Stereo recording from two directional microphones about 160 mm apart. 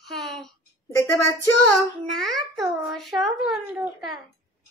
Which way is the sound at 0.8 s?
20° left (ahead or behind).